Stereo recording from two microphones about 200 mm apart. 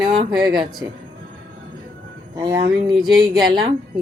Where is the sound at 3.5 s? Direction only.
20° right (ahead or behind).